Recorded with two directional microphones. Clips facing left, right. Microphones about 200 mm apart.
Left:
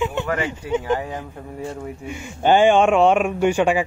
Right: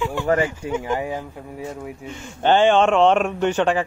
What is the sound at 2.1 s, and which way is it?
Speech, 10° left (ahead or behind).